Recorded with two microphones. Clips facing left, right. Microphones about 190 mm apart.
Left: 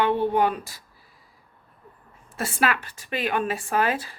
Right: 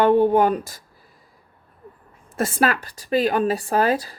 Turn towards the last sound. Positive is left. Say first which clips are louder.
# right 4 dB
turn(degrees=-35)  # may be behind; listen again after turning